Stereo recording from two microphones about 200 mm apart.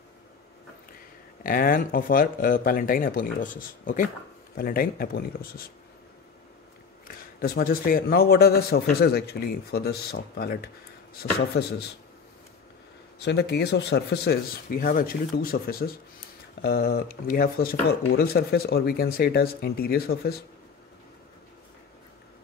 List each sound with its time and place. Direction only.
1.4 s speech: 45° left (ahead or behind)
7.1 s speech: 50° left (ahead or behind)
13.2 s speech: 55° left (ahead or behind)